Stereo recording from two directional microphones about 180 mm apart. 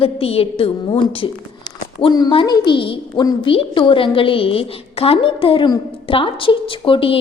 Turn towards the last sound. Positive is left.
turn(degrees=30)  # may be behind; listen again after turning